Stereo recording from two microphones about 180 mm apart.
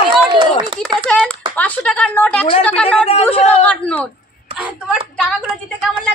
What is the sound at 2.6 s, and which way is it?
Speech, 5° left (ahead or behind).